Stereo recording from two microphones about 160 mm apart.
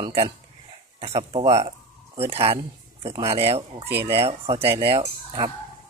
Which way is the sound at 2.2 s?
35° right (ahead or behind).